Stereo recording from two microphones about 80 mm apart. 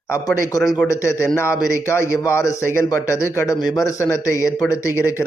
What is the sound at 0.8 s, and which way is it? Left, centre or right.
A man's voice, left.